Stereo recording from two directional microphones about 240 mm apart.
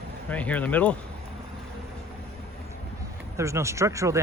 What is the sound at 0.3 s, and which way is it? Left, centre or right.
Speech, centre.